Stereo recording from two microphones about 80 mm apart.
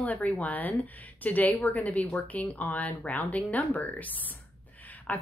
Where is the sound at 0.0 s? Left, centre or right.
Centre.